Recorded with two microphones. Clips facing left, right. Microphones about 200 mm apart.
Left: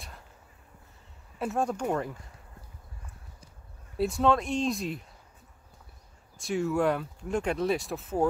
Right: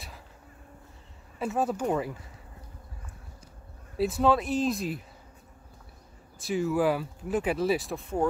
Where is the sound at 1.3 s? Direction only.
Centre (ahead or behind).